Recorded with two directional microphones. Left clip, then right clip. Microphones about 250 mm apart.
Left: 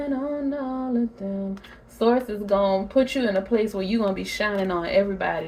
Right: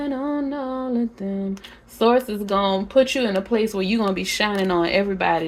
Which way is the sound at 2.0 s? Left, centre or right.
Right.